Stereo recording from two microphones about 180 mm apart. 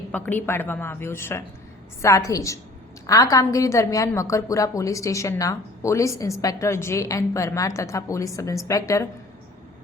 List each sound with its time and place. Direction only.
0.1 s a woman's voice: 10° left (ahead or behind)